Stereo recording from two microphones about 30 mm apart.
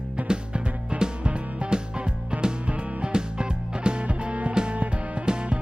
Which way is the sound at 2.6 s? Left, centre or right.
Right.